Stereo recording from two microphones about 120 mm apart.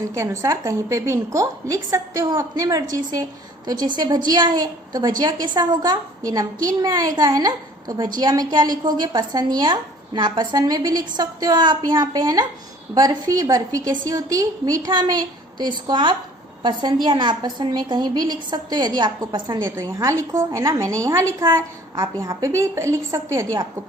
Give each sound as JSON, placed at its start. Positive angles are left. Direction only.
{"t": 0.1, "sound": "a woman's voice", "side_deg": -25}
{"t": 19.6, "sound": "a woman's voice", "side_deg": -25}